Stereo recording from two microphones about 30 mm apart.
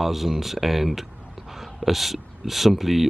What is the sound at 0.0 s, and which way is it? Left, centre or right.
Speech, centre.